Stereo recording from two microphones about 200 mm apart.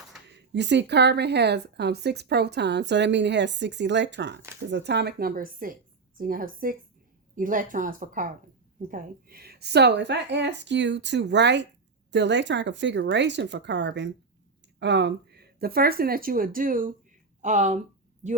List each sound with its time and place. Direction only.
0.3 s speech: 60° right (ahead or behind); by 17.7 s 35° right (ahead or behind)